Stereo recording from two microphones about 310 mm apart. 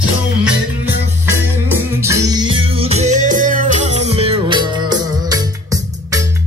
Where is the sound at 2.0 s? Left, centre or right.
Centre.